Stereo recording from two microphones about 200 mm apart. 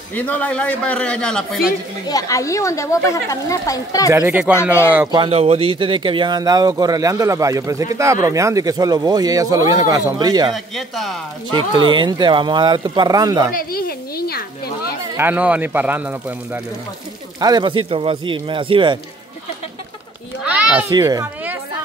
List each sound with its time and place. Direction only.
0.1 s a man's voice: 10° left (ahead or behind)
2.0 s speech: 15° left (ahead or behind)
4.1 s speech: 10° right (ahead or behind)
5.1 s speech: 25° right (ahead or behind)
10.5 s a man's voice: centre (ahead or behind)
11.7 s speech: 25° right (ahead or behind)
13.5 s speech: 45° left (ahead or behind)
15.1 s speech: 10° right (ahead or behind)
17.4 s speech: 20° right (ahead or behind)
20.4 s a sound: 5° right (ahead or behind)
20.9 s speech: 15° right (ahead or behind)